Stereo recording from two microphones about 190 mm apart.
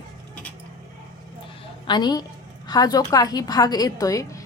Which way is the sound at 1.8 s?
20° left (ahead or behind).